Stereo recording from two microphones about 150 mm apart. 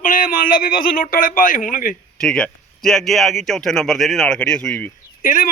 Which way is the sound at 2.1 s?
5° left (ahead or behind).